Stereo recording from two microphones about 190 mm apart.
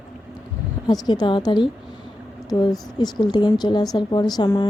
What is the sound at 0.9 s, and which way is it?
Speech, 20° left (ahead or behind).